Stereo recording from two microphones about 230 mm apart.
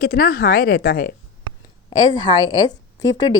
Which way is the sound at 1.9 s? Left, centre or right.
Centre.